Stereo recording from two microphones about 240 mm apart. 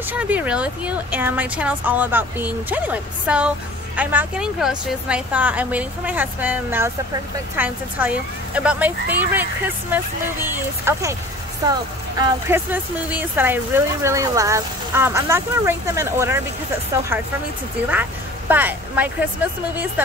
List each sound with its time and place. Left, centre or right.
0.1 s a woman's voice: centre
18.5 s a woman's voice: centre